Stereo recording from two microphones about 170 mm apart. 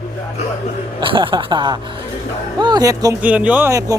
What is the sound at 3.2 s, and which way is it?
Speech, 10° right (ahead or behind).